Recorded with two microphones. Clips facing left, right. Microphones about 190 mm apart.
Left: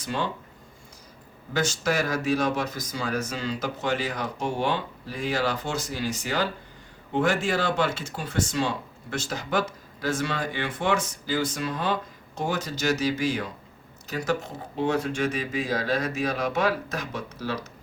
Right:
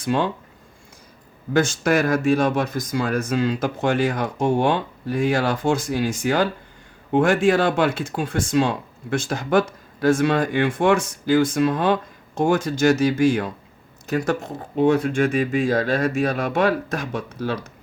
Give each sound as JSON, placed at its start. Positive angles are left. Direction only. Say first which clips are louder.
{"t": 0.0, "sound": "speech", "louder": "right 8 dB", "side_deg": -55}
{"t": 1.5, "sound": "speech", "louder": "right 7 dB", "side_deg": -55}